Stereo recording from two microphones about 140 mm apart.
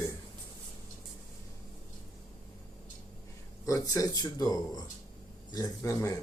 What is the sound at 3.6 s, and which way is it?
Speech, 25° left (ahead or behind).